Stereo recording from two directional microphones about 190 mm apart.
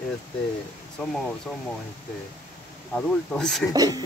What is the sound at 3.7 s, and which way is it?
Speech, 20° right (ahead or behind).